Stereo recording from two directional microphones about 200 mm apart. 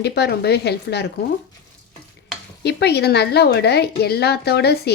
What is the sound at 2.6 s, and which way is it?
A woman's voice, 55° left (ahead or behind).